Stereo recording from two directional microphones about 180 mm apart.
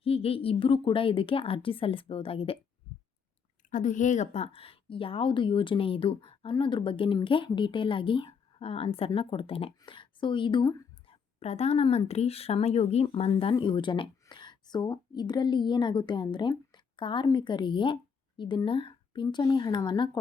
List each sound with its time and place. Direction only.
0.0 s a woman's voice: 35° left (ahead or behind)
3.7 s a woman's voice: 45° left (ahead or behind); by 20.1 s 25° left (ahead or behind)